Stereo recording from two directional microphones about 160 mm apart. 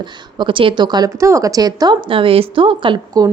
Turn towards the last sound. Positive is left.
turn(degrees=-25)  # may be behind; listen again after turning